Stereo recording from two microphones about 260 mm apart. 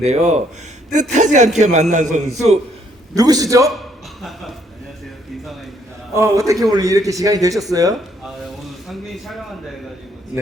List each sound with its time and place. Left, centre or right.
0.0 s speech: right
3.2 s a man's voice: centre
4.2 s a man's voice: centre
6.1 s a man's voice: centre
8.9 s a man's voice: centre